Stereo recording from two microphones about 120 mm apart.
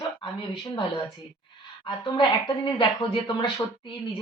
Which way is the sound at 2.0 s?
40° left (ahead or behind).